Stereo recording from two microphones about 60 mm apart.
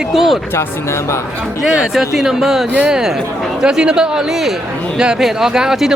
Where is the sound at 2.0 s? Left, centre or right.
Centre.